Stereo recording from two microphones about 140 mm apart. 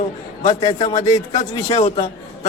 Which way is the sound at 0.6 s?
30° left (ahead or behind).